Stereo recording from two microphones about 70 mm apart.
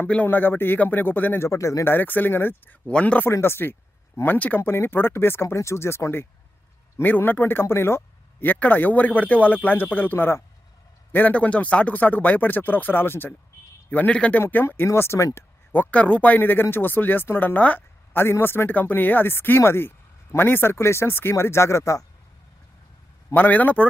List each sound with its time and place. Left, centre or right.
0.1 s speech: left
1.5 s speech: left
1.8 s speech: left
2.8 s speech: centre
3.2 s speech: left
7.0 s speech: left
13.9 s speech: centre
14.8 s speech: left
15.7 s speech: left
23.3 s speech: left